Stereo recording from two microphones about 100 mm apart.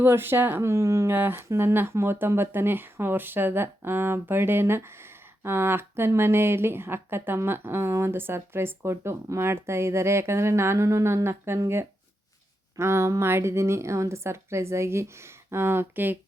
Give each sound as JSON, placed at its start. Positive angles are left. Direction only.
{"t": 0.0, "sound": "speech", "side_deg": -20}
{"t": 1.1, "sound": "speech", "side_deg": -20}